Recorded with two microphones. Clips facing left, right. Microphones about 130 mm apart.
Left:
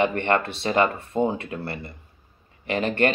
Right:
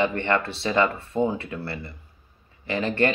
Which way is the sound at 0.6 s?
50° left (ahead or behind).